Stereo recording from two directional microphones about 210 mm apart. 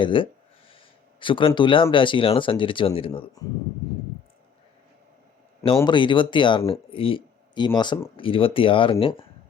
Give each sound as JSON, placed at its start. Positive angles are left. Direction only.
{"t": 0.0, "sound": "speech", "side_deg": 25}
{"t": 5.7, "sound": "speech", "side_deg": 20}